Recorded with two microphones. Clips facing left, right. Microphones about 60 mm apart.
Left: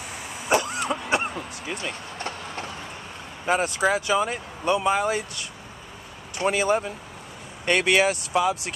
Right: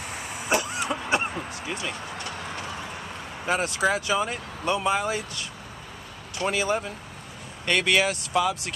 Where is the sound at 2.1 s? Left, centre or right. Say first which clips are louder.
Left 1 dB; left.